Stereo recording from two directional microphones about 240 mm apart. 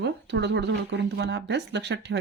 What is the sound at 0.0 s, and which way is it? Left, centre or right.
Speech, right.